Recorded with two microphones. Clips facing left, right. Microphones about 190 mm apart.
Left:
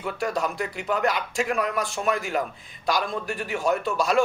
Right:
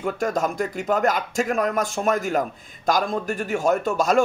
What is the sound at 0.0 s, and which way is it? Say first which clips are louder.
A man's voice: right 3 dB; 45° right (ahead or behind).